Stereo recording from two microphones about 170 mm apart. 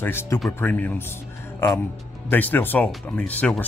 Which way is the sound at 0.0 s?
15° left (ahead or behind).